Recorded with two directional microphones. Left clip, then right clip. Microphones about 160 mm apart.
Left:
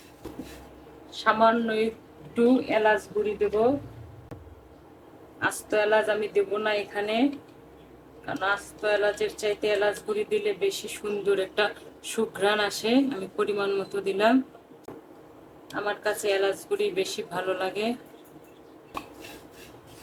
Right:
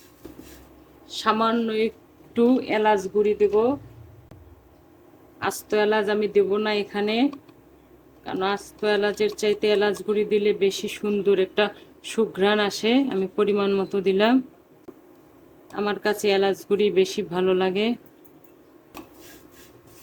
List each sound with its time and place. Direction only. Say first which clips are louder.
1.1 s speech: left 1 dB; 70° right (ahead or behind)
5.4 s speech: right 2 dB; 60° right (ahead or behind)
8.3 s speech: right 2 dB; 65° right (ahead or behind)
15.7 s speech: right 3 dB; 60° right (ahead or behind)